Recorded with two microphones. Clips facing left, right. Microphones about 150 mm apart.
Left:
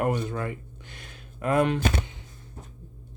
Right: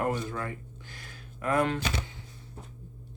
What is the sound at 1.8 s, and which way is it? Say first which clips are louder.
Speech: left 6 dB; 50° left (ahead or behind).